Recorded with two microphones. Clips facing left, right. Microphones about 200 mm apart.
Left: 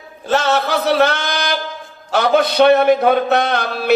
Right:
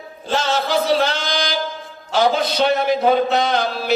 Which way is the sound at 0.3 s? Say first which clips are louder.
Left 4 dB; 60° left (ahead or behind).